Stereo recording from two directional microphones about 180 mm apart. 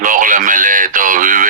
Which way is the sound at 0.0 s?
50° right (ahead or behind).